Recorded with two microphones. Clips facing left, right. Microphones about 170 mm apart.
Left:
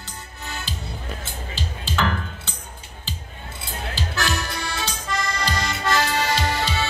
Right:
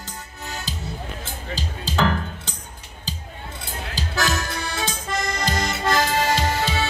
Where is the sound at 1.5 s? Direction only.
40° right (ahead or behind).